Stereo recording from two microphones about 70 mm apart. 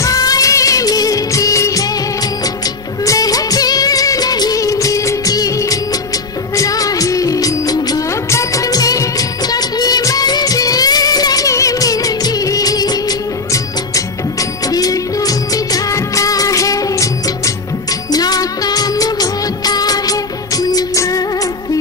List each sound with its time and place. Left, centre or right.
0.0 s music of bollywood: left
3.1 s music of bollywood: left
9.5 s music: left
14.7 s music of bollywood: left
18.1 s music of bollywood: left
20.9 s music: left